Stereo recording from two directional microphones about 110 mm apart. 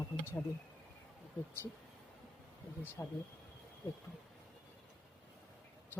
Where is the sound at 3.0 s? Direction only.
30° left (ahead or behind).